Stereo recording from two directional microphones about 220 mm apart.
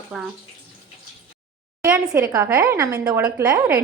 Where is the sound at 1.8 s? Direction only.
10° right (ahead or behind).